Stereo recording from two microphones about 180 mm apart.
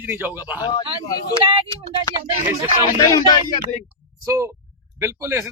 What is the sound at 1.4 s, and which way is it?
Speech, 30° right (ahead or behind).